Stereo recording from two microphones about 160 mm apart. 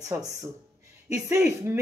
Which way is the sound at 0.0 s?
20° right (ahead or behind).